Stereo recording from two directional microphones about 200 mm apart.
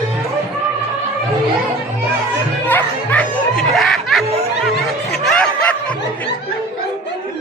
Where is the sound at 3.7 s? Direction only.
Centre (ahead or behind).